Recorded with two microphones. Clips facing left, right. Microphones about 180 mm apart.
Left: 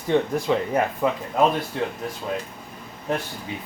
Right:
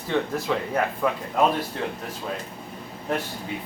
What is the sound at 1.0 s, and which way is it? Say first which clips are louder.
Speech: left 1 dB; 20° left (ahead or behind).